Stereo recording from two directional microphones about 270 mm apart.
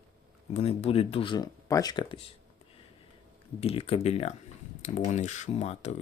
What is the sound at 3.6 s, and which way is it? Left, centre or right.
Speech, left.